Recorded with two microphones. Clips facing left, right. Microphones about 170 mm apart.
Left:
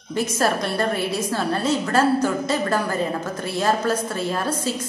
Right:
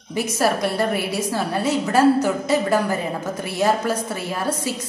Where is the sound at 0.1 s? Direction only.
10° right (ahead or behind).